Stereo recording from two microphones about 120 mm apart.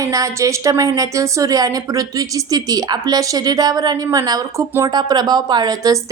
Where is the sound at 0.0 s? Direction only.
30° right (ahead or behind).